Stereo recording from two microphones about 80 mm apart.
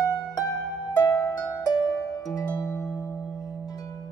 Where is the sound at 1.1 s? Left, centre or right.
Left.